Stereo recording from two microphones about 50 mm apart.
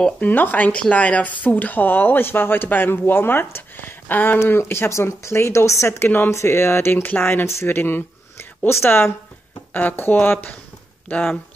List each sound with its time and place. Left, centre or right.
0.2 s speech: left
0.7 s speech: left
4.5 s speech: left
5.9 s speech: left
6.3 s speech: left
8.4 s speech: left